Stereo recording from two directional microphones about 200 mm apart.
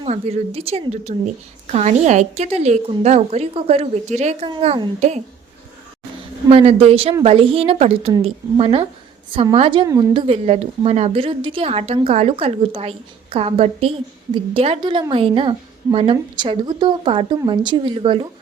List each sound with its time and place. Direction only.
0.0 s a woman's voice: 30° right (ahead or behind)
6.5 s a woman's voice: 30° right (ahead or behind)